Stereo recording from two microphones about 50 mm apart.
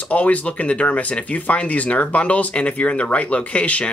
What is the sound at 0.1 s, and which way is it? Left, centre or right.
Speech, left.